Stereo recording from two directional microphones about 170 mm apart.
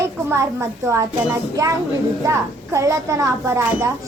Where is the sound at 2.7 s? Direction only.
20° right (ahead or behind).